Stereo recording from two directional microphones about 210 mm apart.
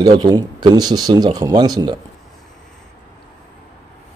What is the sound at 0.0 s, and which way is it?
Speech, 20° right (ahead or behind).